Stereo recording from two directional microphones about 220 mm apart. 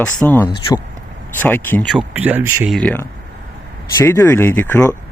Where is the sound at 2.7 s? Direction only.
5° left (ahead or behind).